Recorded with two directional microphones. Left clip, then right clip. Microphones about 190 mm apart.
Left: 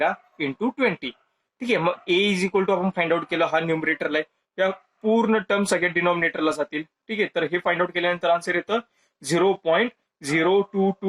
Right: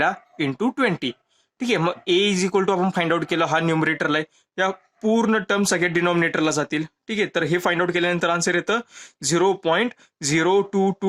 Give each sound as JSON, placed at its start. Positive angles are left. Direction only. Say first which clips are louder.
{"t": 0.0, "sound": "speech", "louder": "right 2 dB", "side_deg": -50}